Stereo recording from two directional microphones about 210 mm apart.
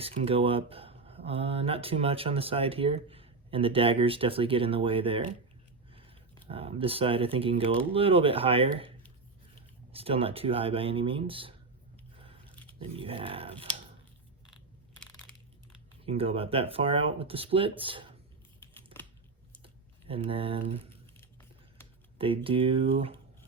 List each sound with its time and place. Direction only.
0.0 s speech: 25° right (ahead or behind)
12.1 s biting: 25° right (ahead or behind)
12.5 s a sound: 10° left (ahead or behind)
13.0 s speech: 25° right (ahead or behind)
14.5 s crushing: 5° left (ahead or behind)
16.0 s speech: 25° right (ahead or behind)
18.9 s typing: 25° right (ahead or behind)
22.4 s speech: 25° right (ahead or behind)